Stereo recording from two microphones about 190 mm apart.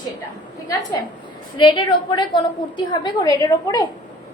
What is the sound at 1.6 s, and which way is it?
A woman's voice, 25° left (ahead or behind).